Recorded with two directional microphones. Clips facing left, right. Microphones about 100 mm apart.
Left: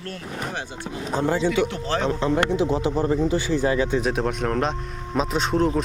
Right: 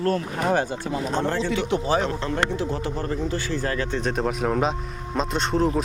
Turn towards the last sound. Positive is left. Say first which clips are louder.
# left 1 dB
turn(degrees=0)  # may be behind; listen again after turning